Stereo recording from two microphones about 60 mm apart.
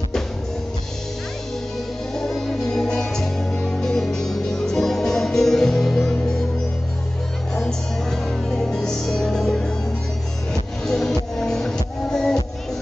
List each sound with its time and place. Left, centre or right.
2.1 s music: centre
7.5 s music: centre
10.9 s music: centre